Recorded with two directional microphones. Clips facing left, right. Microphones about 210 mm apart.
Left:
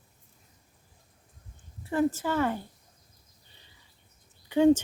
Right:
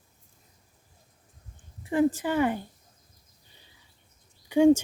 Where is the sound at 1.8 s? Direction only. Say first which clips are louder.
Right 3 dB; 15° right (ahead or behind).